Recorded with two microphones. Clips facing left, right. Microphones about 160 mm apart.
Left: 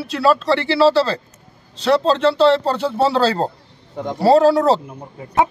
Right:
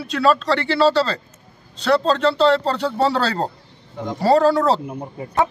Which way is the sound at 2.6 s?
10° left (ahead or behind).